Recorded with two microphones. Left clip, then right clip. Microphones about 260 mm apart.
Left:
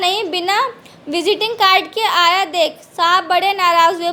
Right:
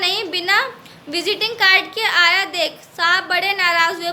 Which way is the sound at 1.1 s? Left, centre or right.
Left.